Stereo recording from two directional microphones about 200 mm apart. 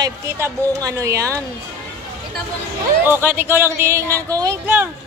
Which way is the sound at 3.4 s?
10° right (ahead or behind).